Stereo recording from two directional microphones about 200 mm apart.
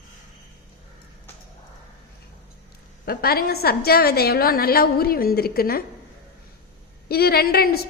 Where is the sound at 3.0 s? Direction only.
50° left (ahead or behind).